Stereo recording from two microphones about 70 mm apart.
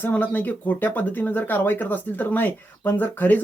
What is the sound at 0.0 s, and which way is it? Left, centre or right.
Speech, left.